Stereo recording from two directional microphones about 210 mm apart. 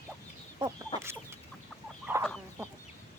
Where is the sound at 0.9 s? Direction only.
25° left (ahead or behind).